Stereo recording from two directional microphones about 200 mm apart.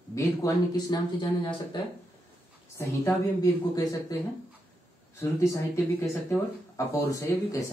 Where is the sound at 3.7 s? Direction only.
15° left (ahead or behind).